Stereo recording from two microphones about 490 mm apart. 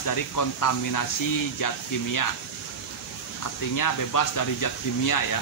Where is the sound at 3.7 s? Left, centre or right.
Left.